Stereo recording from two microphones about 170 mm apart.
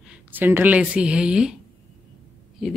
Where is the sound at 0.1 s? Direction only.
10° right (ahead or behind).